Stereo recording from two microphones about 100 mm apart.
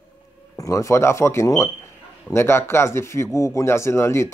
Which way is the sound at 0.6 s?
30° left (ahead or behind).